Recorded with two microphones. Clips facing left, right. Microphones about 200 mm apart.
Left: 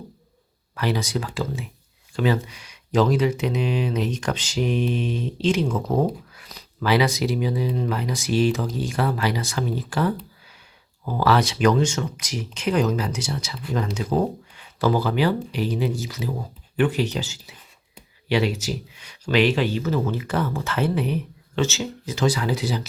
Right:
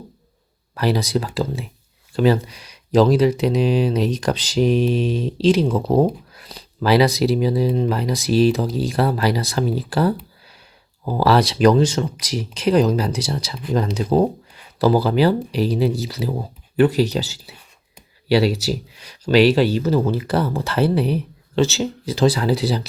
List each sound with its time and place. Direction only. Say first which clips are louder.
0.8 s speech: right 5 dB; 35° right (ahead or behind)